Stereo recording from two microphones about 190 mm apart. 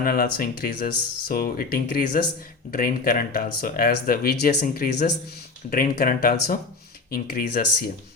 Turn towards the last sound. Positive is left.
turn(degrees=55)  # may be behind; listen again after turning